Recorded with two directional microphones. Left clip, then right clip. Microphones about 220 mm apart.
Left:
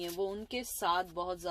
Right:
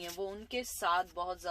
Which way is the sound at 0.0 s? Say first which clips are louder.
Left 4 dB; 45° left (ahead or behind).